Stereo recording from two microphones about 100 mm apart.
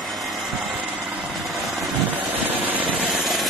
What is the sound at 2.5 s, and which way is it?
Vehicle, 20° right (ahead or behind).